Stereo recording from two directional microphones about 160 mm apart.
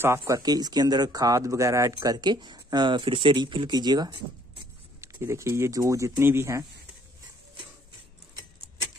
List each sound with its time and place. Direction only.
0.0 s speech: 15° right (ahead or behind)